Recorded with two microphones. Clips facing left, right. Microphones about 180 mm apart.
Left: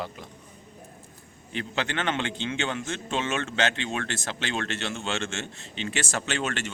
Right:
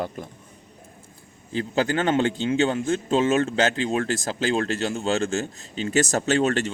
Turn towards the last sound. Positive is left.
turn(degrees=-35)  # may be behind; listen again after turning